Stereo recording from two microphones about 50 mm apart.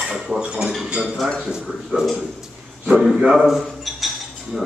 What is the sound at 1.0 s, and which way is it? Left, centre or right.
Speech, centre.